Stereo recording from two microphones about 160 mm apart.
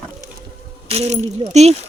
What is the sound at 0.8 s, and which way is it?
Speech, 40° right (ahead or behind).